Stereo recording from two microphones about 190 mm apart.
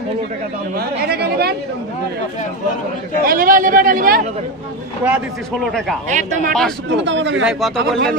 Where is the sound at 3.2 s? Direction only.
50° right (ahead or behind).